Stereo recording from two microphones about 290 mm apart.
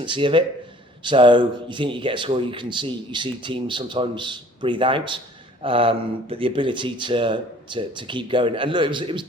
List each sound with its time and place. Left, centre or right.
0.0 s speech: centre